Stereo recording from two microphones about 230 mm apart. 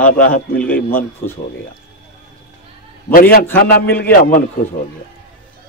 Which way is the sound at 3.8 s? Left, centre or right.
Centre.